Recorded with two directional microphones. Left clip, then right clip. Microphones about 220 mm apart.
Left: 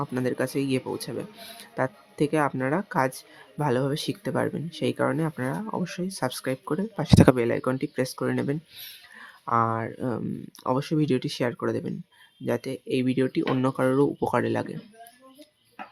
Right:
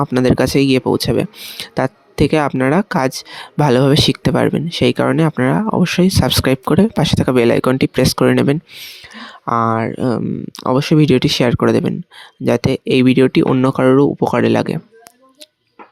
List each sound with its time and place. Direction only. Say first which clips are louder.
0.0 s speech: right 13 dB; 40° right (ahead or behind)
7.1 s speech: right 2 dB; centre (ahead or behind)
7.3 s speech: right 13 dB; 40° right (ahead or behind)
8.7 s speech: right 11 dB; 25° right (ahead or behind)